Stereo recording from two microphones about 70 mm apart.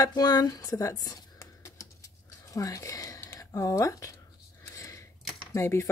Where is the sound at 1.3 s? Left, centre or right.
Left.